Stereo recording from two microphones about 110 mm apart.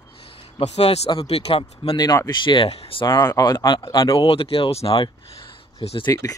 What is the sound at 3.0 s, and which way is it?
Speech, 30° left (ahead or behind).